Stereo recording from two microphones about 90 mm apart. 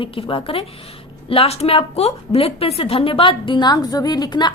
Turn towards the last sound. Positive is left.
turn(degrees=55)  # may be behind; listen again after turning